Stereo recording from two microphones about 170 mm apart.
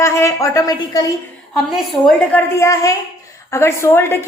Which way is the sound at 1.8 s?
5° left (ahead or behind).